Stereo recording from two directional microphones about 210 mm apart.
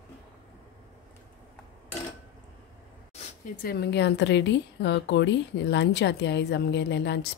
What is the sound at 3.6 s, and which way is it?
Speech, 50° left (ahead or behind).